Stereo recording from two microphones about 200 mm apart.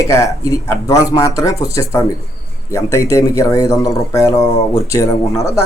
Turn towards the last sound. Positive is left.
turn(degrees=15)  # may be behind; listen again after turning